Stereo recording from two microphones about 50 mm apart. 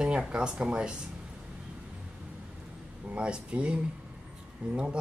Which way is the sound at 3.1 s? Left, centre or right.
Right.